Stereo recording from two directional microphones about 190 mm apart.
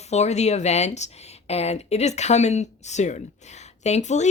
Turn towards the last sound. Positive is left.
turn(degrees=40)  # may be behind; listen again after turning